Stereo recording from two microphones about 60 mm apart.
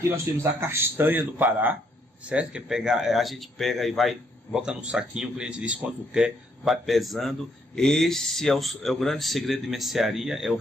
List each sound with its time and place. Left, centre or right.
0.1 s speech: right
2.2 s speech: centre
2.7 s a man's voice: centre
6.6 s speech: centre